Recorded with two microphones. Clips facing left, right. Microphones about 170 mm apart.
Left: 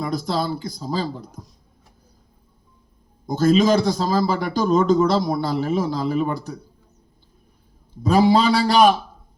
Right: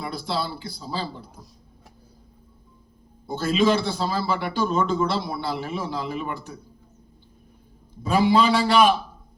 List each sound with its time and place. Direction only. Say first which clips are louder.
0.0 s speech: left 5 dB; 40° left (ahead or behind)
3.2 s a man's voice: left 5 dB; 40° left (ahead or behind)
8.0 s a man's voice: left 3 dB; 40° left (ahead or behind)